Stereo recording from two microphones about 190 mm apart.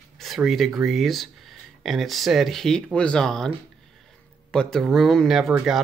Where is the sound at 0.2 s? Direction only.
Centre (ahead or behind).